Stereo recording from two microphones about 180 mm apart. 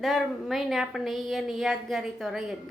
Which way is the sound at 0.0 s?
Centre (ahead or behind).